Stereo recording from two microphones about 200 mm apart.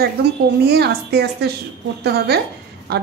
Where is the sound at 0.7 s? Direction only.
55° right (ahead or behind).